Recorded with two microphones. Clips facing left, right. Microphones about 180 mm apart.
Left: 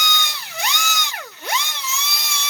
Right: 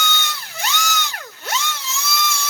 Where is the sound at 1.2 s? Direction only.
15° left (ahead or behind).